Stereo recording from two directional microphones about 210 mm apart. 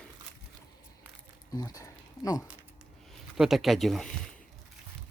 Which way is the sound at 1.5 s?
20° left (ahead or behind).